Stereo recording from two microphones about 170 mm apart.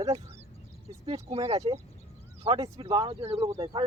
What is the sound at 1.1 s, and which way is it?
Speech, 35° right (ahead or behind).